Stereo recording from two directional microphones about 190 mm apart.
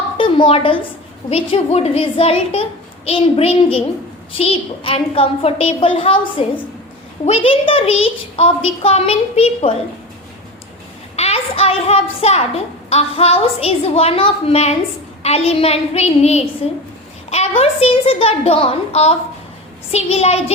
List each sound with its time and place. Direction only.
0.2 s a woman's voice: 25° left (ahead or behind)
11.2 s a child's voice: 30° left (ahead or behind)